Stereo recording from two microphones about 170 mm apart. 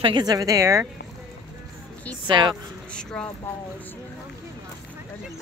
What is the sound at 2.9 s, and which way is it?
Speech, 5° left (ahead or behind).